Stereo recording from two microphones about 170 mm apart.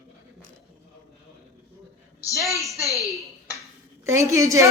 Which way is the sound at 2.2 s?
20° left (ahead or behind).